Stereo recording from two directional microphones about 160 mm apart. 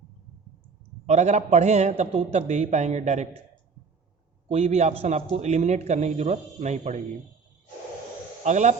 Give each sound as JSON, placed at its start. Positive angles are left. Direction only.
{"t": 1.0, "sound": "a man's voice", "side_deg": -45}
{"t": 4.4, "sound": "a man's voice", "side_deg": -40}
{"t": 8.4, "sound": "a man's voice", "side_deg": -50}